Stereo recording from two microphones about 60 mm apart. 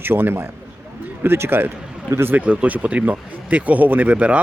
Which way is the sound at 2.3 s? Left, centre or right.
Right.